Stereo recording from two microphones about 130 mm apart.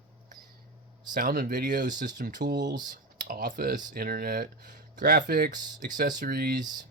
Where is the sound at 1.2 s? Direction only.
90° right.